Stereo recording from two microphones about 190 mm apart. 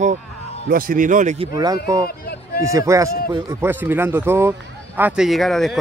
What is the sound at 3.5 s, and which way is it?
Speech, 10° right (ahead or behind).